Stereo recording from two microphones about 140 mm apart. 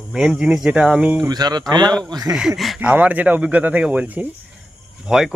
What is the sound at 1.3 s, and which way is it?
Speech, 30° right (ahead or behind).